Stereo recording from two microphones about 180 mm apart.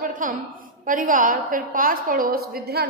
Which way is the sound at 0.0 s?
50° right (ahead or behind).